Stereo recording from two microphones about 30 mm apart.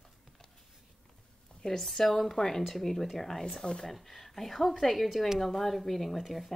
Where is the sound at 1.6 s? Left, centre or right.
Centre.